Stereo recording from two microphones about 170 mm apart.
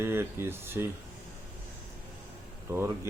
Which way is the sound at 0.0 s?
15° right (ahead or behind).